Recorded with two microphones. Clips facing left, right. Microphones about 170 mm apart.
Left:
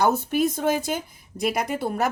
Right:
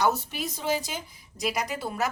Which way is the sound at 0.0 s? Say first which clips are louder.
Left 6 dB; 50° left (ahead or behind).